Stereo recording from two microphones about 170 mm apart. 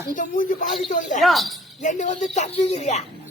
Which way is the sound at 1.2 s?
Centre (ahead or behind).